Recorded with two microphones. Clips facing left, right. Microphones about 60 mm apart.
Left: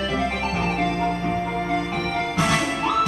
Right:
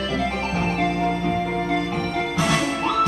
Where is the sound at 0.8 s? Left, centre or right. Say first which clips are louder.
Right 2 dB; centre.